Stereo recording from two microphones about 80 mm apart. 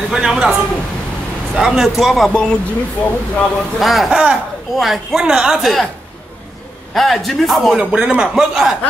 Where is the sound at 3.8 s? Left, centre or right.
Centre.